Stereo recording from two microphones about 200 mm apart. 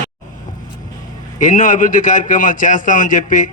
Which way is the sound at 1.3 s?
40° left (ahead or behind).